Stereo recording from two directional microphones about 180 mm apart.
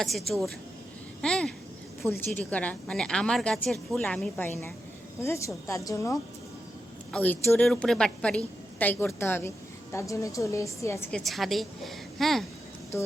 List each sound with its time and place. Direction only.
0.0 s a woman's voice: centre (ahead or behind); by 6.1 s 15° left (ahead or behind)
7.1 s a woman's voice: 5° left (ahead or behind)
11.1 s a woman's voice: centre (ahead or behind)